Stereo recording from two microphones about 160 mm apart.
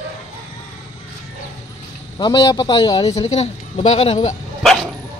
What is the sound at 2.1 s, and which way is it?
A man's voice, 30° left (ahead or behind).